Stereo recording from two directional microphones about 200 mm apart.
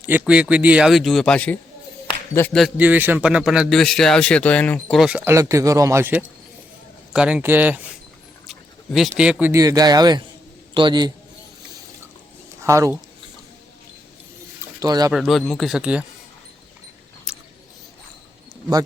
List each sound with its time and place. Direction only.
0.0 s a man's voice: 10° right (ahead or behind)
12.6 s speech: 15° right (ahead or behind)
14.8 s a man's voice: 20° right (ahead or behind)
15.1 s a man's voice: centre (ahead or behind)
17.3 s a sound: 5° right (ahead or behind)